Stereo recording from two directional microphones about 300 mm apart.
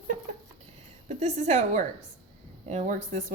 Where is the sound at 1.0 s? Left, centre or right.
Right.